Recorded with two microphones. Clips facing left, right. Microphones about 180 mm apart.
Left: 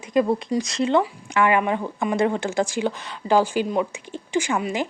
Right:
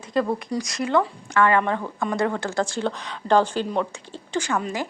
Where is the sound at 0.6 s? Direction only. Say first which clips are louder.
Even; 25° left (ahead or behind).